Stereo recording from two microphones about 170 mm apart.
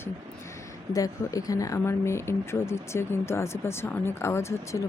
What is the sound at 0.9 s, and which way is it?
Speech, 20° left (ahead or behind).